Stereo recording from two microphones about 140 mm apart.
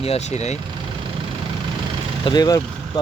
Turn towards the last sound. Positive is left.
turn(degrees=30)  # may be behind; listen again after turning